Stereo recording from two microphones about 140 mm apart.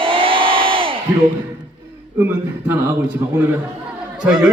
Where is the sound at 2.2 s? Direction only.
15° right (ahead or behind).